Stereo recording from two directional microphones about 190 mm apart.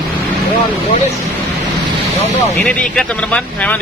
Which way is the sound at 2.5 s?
5° left (ahead or behind).